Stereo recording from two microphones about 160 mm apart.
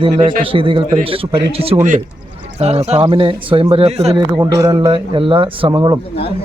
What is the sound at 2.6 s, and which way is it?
Speech, 40° right (ahead or behind).